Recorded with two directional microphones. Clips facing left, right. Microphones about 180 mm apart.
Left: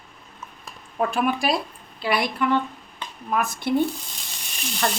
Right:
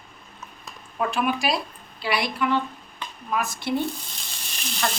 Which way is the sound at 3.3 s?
55° left (ahead or behind).